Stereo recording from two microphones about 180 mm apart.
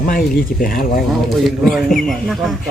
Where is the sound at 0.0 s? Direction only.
50° left (ahead or behind).